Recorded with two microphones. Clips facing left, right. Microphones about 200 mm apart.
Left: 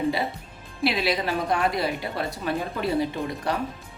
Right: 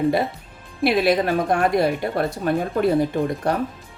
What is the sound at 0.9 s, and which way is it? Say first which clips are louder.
Speech: right 7 dB; 50° right (ahead or behind).